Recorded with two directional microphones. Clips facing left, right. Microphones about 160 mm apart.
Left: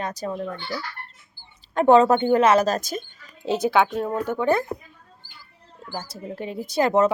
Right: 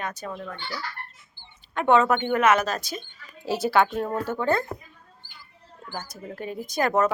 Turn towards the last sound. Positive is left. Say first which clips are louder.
# left 4 dB
turn(degrees=20)  # may be behind; listen again after turning